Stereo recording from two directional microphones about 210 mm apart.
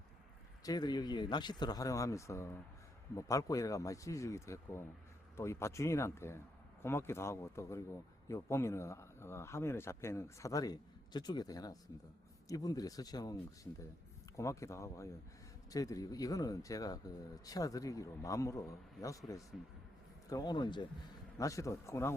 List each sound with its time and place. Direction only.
0.6 s speech: 20° left (ahead or behind)